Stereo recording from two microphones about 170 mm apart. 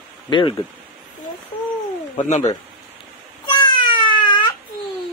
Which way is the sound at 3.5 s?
30° left (ahead or behind).